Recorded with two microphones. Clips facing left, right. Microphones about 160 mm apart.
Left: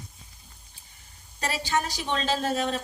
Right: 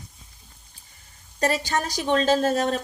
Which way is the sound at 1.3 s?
45° right (ahead or behind).